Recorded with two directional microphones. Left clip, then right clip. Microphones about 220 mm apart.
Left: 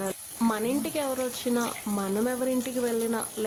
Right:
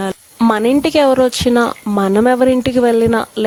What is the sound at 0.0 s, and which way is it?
Speech, 45° right (ahead or behind).